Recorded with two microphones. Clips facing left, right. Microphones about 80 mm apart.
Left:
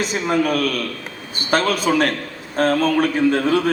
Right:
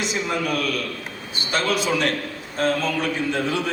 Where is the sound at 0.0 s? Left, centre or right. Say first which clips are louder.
Left 5 dB; left.